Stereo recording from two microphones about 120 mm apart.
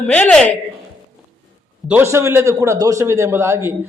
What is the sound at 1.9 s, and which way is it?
A man's voice, 20° right (ahead or behind).